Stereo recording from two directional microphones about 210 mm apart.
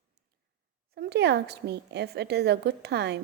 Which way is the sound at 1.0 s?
50° right (ahead or behind).